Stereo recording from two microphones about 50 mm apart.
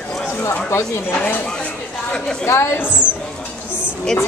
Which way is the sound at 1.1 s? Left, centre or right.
Left.